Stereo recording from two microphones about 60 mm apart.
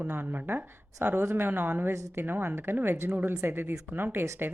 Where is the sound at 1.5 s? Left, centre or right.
Right.